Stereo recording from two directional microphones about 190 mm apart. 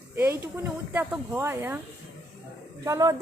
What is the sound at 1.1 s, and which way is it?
Speech, 5° right (ahead or behind).